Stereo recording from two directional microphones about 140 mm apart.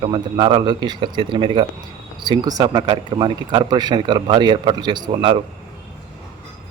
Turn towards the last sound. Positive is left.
turn(degrees=-40)  # may be behind; listen again after turning